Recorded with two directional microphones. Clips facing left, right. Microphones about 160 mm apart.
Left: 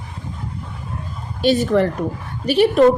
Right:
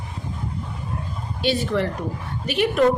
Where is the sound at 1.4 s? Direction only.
45° left (ahead or behind).